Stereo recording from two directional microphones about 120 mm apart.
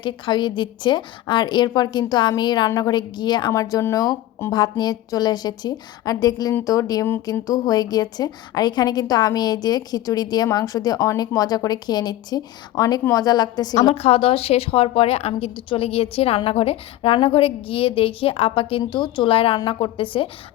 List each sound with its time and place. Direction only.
0.0 s a woman's voice: 40° left (ahead or behind)
3.5 s a woman's voice: 30° left (ahead or behind)
13.9 s a woman's voice: 55° left (ahead or behind)